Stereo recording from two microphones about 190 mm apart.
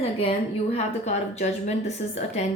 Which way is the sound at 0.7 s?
35° left (ahead or behind).